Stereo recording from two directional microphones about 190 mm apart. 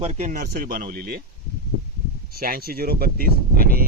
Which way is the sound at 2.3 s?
50° right (ahead or behind).